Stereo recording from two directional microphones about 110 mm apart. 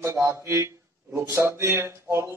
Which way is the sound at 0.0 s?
25° right (ahead or behind).